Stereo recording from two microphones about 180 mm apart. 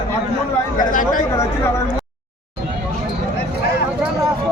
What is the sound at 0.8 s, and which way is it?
Speech, 45° left (ahead or behind).